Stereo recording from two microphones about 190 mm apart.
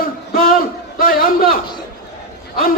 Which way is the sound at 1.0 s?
50° left (ahead or behind).